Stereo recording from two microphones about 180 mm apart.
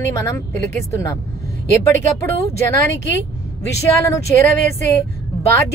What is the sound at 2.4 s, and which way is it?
Speech, 15° left (ahead or behind).